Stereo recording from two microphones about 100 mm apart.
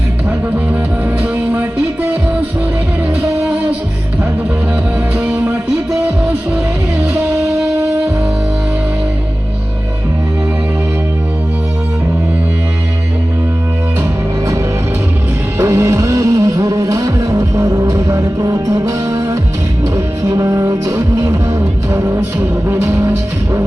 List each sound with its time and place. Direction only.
5.1 s music: 10° right (ahead or behind)
15.5 s music: 30° right (ahead or behind)